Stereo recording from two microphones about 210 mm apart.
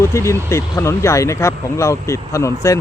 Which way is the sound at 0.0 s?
15° left (ahead or behind).